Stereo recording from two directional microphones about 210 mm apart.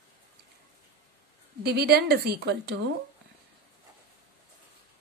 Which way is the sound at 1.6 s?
50° right (ahead or behind).